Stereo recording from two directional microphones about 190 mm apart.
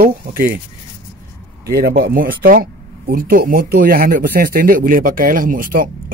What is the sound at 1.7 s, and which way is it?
Speech, 50° right (ahead or behind).